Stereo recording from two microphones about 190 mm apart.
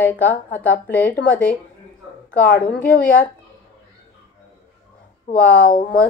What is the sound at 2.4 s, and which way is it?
Speech, 50° left (ahead or behind).